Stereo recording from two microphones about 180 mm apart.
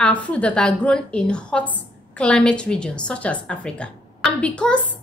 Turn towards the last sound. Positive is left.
turn(degrees=5)  # may be behind; listen again after turning